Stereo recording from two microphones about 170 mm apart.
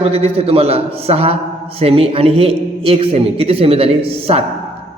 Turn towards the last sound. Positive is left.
turn(degrees=-35)  # may be behind; listen again after turning